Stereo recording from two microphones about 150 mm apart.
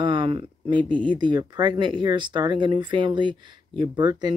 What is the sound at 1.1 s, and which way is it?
Speech, 30° right (ahead or behind).